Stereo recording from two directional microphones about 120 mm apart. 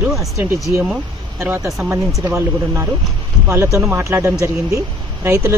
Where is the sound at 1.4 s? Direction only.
20° right (ahead or behind).